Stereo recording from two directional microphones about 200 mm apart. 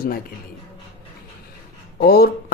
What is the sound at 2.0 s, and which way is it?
Speech, 50° left (ahead or behind).